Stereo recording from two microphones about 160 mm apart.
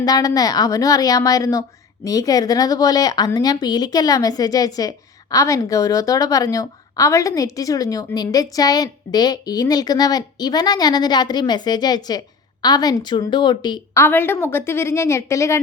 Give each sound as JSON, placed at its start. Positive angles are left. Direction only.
{"t": 0.0, "sound": "speech", "side_deg": 20}
{"t": 14.0, "sound": "a woman's voice", "side_deg": 15}